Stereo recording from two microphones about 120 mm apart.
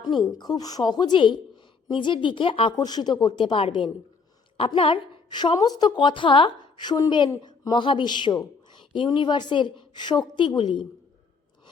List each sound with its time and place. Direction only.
0.1 s speech: centre (ahead or behind)
0.3 s a woman's voice: 35° left (ahead or behind)
2.7 s a woman's voice: 35° left (ahead or behind)